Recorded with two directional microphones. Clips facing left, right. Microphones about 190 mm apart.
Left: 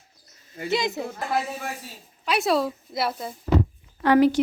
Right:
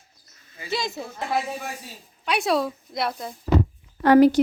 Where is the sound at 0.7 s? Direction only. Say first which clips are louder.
Left 3 dB; 20° left (ahead or behind).